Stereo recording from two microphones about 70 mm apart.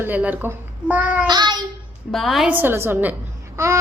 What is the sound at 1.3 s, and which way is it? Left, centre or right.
Child singing, right.